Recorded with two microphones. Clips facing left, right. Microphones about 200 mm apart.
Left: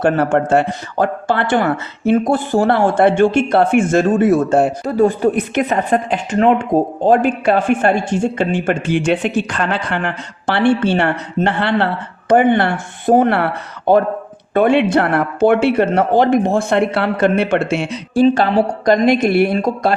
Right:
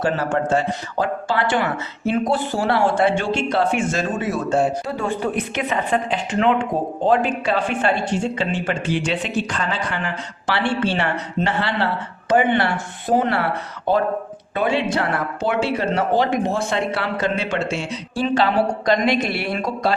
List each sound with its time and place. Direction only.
0.0 s a woman's voice: 60° left (ahead or behind)
4.9 s a woman's voice: 40° left (ahead or behind); by 17.8 s 60° left (ahead or behind)
18.2 s a woman's voice: 45° left (ahead or behind)